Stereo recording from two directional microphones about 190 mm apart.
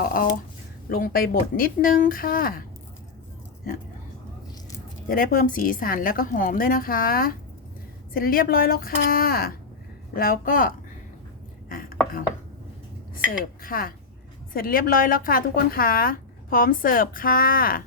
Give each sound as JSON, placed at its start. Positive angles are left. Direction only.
{"t": 0.0, "sound": "speech", "side_deg": 50}
{"t": 5.0, "sound": "speech", "side_deg": 45}
{"t": 13.6, "sound": "speech", "side_deg": 50}